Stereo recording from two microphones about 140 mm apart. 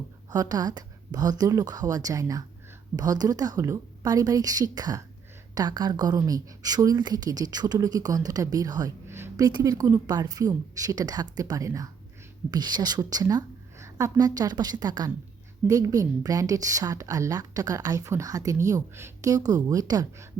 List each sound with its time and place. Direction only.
0.3 s a woman's voice: 30° right (ahead or behind)
9.1 s a sound: 15° right (ahead or behind)
9.5 s a woman's voice: 30° right (ahead or behind)